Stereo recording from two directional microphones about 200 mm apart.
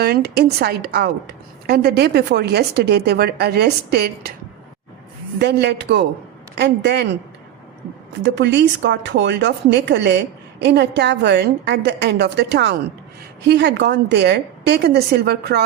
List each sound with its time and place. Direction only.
0.0 s a woman's voice: 55° right (ahead or behind)
5.4 s speech: 55° right (ahead or behind)
8.2 s speech: 60° right (ahead or behind)